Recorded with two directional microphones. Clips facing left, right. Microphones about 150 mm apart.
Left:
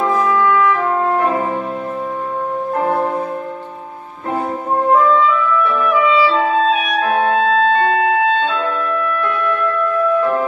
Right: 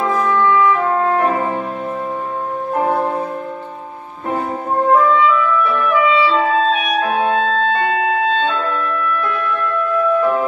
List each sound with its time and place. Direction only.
0.2 s music: centre (ahead or behind)
7.2 s music: 5° left (ahead or behind)
7.6 s music: 35° left (ahead or behind)
8.2 s music: 10° left (ahead or behind)